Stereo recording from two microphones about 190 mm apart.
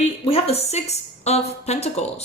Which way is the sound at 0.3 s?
30° left (ahead or behind).